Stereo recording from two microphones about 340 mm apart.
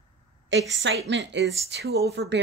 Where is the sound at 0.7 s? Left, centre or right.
Right.